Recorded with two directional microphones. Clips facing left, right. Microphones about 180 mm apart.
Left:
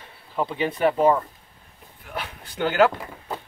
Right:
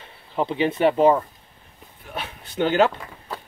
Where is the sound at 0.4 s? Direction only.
20° right (ahead or behind).